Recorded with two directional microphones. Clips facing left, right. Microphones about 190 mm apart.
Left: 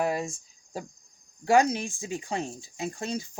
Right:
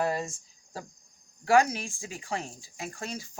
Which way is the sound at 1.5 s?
20° left (ahead or behind).